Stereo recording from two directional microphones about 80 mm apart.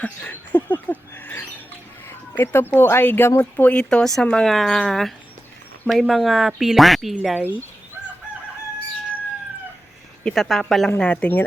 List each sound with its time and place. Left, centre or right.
0.0 s speech: centre
3.7 s speech: centre
7.3 s speech: right
10.2 s speech: centre
10.9 s speech: centre